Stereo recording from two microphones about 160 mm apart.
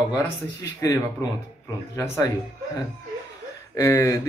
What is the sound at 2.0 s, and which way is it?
Speech, 20° left (ahead or behind).